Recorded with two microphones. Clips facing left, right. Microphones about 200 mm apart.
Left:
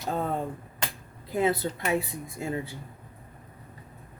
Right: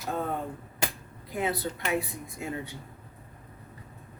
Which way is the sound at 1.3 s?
25° left (ahead or behind).